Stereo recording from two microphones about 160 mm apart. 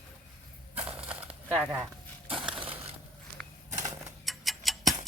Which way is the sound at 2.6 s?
35° right (ahead or behind).